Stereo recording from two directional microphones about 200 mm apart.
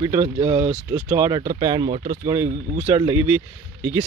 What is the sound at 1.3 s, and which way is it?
Speech, 20° right (ahead or behind).